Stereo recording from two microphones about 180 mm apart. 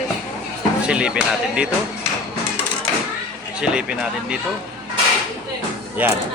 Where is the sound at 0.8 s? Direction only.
5° right (ahead or behind).